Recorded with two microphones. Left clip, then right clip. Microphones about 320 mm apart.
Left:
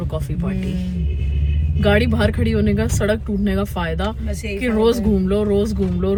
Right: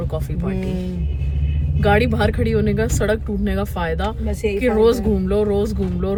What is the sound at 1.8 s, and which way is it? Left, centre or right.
Speech, centre.